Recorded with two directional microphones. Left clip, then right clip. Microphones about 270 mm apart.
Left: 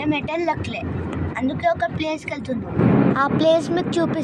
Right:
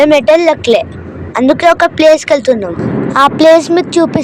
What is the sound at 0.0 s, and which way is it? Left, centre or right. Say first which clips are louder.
Speech: right 17 dB; right.